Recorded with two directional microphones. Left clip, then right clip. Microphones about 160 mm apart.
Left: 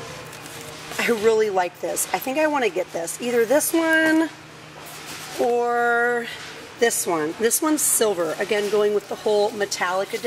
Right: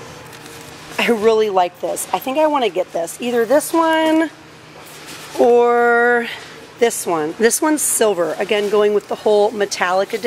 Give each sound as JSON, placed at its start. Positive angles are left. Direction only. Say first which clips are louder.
{"t": 0.9, "sound": "speech", "louder": "right 5 dB", "side_deg": -15}
{"t": 5.5, "sound": "speech", "louder": "right 8 dB", "side_deg": -10}
{"t": 5.9, "sound": "a sound", "louder": "right 7 dB", "side_deg": -20}
{"t": 6.8, "sound": "speech", "louder": "right 4 dB", "side_deg": -10}
{"t": 9.1, "sound": "speech", "louder": "right 6 dB", "side_deg": -50}
{"t": 9.6, "sound": "speech", "louder": "right 6 dB", "side_deg": -20}